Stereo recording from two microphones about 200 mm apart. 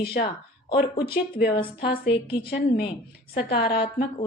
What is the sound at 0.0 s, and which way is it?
A woman's voice, 50° left (ahead or behind).